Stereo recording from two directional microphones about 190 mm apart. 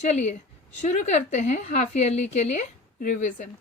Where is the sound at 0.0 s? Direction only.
35° left (ahead or behind).